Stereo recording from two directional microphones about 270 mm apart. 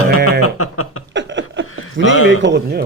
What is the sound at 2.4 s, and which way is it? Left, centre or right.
Speech, right.